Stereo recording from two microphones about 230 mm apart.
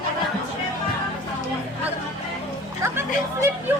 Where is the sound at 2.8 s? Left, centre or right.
Centre.